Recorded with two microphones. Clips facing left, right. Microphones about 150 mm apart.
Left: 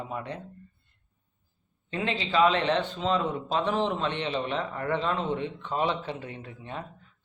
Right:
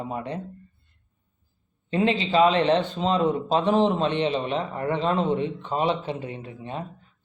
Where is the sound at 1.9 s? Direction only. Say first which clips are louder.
Right 7 dB; 25° right (ahead or behind).